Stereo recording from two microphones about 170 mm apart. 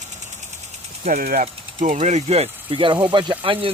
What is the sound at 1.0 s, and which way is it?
Speech, 55° right (ahead or behind).